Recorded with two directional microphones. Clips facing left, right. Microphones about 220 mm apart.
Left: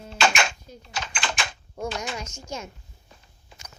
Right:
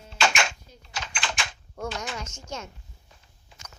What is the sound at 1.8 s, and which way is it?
Speech, 10° left (ahead or behind).